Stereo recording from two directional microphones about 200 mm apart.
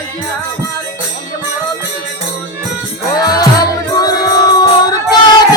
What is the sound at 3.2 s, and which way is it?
Music, 20° left (ahead or behind).